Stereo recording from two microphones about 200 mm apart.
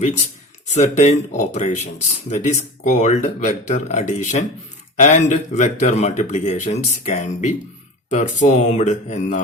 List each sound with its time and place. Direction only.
0.7 s speech: 35° left (ahead or behind)